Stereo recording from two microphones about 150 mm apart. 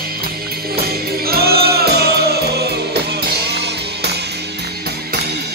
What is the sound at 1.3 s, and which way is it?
Music, 90° right.